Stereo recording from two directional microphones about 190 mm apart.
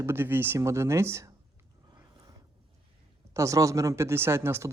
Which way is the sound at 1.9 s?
20° right (ahead or behind).